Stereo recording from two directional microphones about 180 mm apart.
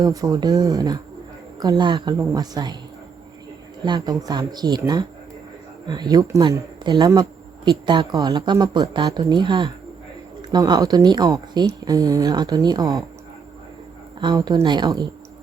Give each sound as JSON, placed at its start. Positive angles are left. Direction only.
{"t": 0.0, "sound": "speech", "side_deg": -20}
{"t": 3.8, "sound": "speech", "side_deg": -25}
{"t": 14.2, "sound": "speech", "side_deg": -25}